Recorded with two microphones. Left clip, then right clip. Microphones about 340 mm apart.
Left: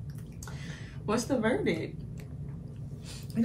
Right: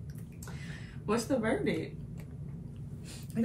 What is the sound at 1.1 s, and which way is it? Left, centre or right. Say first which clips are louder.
Speech: left 2 dB; centre.